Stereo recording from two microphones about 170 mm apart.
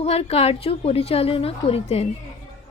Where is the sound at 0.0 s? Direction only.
35° left (ahead or behind).